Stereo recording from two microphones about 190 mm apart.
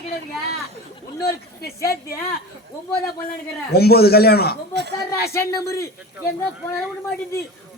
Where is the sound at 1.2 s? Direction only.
55° left (ahead or behind).